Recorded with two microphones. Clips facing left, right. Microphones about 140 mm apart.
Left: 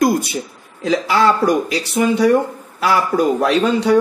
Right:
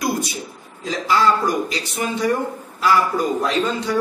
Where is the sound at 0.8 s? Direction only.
70° left (ahead or behind).